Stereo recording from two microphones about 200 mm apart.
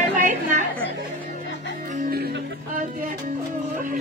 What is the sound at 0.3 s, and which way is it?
Chatter, 40° right (ahead or behind).